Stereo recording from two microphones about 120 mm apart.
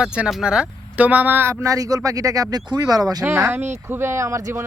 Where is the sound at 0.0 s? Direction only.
5° right (ahead or behind); by 3.2 s 30° right (ahead or behind).